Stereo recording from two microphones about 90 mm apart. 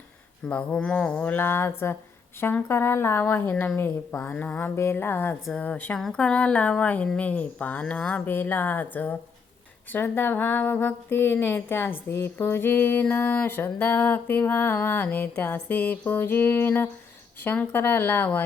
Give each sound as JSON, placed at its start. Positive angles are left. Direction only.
{"t": 0.4, "sound": "speech", "side_deg": 10}
{"t": 4.2, "sound": "speech", "side_deg": 15}
{"t": 4.7, "sound": "speech", "side_deg": 30}